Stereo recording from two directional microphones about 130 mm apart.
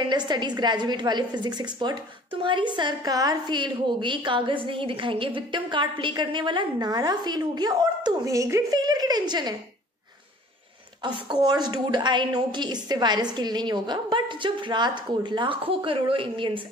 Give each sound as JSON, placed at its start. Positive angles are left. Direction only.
{"t": 0.1, "sound": "a woman's voice", "side_deg": -35}
{"t": 11.2, "sound": "a woman's voice", "side_deg": -35}